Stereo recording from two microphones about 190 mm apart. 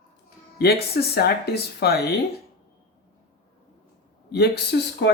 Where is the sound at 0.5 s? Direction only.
55° left (ahead or behind).